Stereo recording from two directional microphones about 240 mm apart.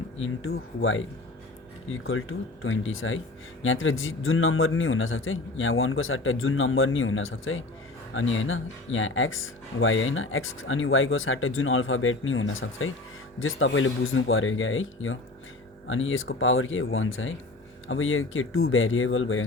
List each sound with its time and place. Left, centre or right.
0.8 s speech: left